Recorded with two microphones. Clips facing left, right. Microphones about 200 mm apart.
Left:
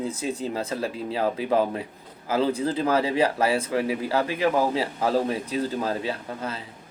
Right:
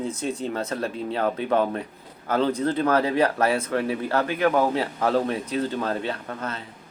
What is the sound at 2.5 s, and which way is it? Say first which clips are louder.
Speech: right 1 dB; 30° left (ahead or behind).